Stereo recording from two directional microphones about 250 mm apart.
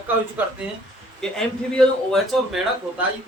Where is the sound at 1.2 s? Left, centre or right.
Centre.